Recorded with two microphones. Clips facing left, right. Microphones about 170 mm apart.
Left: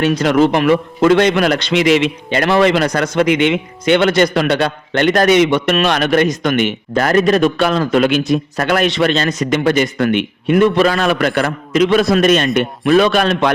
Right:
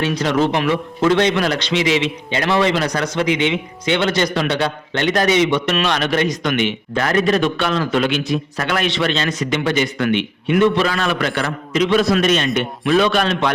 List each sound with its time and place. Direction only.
0.0 s a man's voice: 55° left (ahead or behind)